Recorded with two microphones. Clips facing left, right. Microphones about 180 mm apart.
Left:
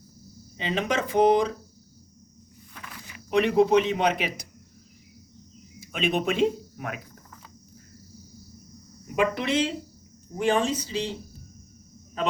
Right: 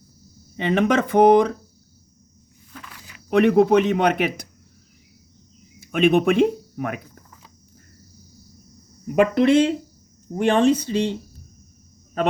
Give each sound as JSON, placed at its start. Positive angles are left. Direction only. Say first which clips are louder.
{"t": 0.5, "sound": "speech", "louder": "right 8 dB", "side_deg": -60}
{"t": 3.2, "sound": "speech", "louder": "right 5 dB", "side_deg": -55}
{"t": 5.8, "sound": "speech", "louder": "right 9 dB", "side_deg": -55}
{"t": 9.1, "sound": "speech", "louder": "right 9 dB", "side_deg": -55}